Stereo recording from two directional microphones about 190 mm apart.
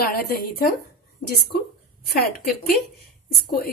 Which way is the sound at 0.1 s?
55° left (ahead or behind).